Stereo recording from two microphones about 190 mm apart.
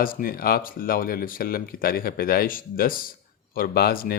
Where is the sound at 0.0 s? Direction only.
50° left (ahead or behind).